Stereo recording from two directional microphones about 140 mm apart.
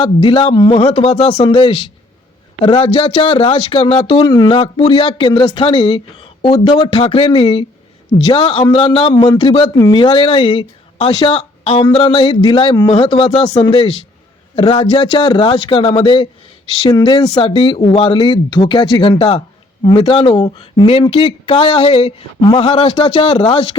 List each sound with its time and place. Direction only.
0.0 s speech: 35° left (ahead or behind)
4.2 s speech: 30° left (ahead or behind)
6.5 s speech: 30° left (ahead or behind)